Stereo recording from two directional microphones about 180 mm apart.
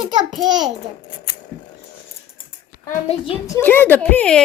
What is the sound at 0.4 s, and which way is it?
Speech, 25° right (ahead or behind).